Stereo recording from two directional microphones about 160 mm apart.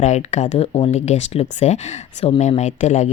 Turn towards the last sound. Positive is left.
turn(degrees=45)  # may be behind; listen again after turning